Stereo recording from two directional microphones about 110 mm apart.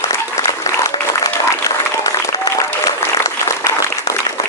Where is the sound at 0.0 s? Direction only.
30° left (ahead or behind).